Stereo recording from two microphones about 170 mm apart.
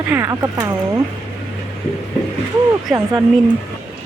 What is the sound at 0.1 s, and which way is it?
Speech, 20° right (ahead or behind).